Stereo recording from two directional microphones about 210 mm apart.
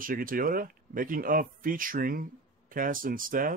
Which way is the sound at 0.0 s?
40° right (ahead or behind).